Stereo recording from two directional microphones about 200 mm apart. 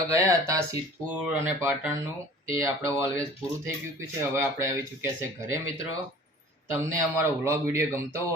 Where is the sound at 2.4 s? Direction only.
15° right (ahead or behind).